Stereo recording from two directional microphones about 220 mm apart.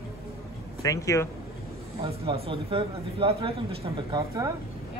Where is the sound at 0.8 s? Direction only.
15° left (ahead or behind).